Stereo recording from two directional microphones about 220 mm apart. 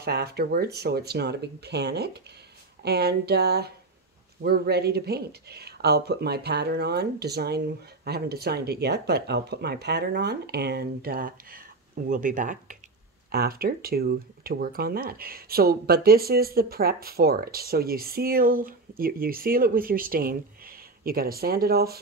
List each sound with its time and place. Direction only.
0.0 s speech: 45° right (ahead or behind)